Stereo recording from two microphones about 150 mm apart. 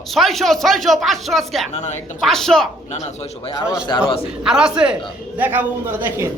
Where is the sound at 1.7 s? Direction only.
50° left (ahead or behind).